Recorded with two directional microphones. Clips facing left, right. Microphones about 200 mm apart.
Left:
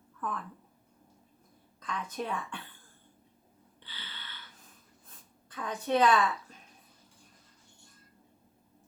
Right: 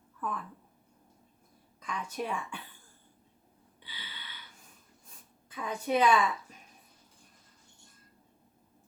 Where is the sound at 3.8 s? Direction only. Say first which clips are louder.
Even; 10° right (ahead or behind).